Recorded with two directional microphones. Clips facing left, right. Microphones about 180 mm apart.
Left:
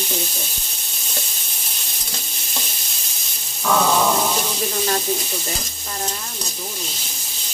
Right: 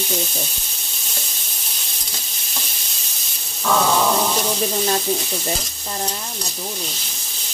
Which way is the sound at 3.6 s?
Centre (ahead or behind).